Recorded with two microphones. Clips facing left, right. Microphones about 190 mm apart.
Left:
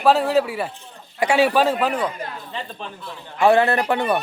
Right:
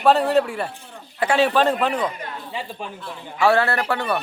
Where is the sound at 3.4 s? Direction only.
15° left (ahead or behind).